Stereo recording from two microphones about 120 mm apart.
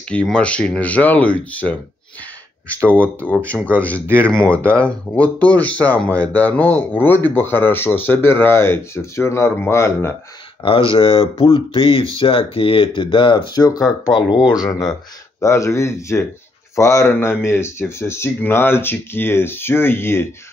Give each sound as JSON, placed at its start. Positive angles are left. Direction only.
{"t": 0.1, "sound": "speech", "side_deg": 10}
{"t": 10.9, "sound": "speech", "side_deg": 50}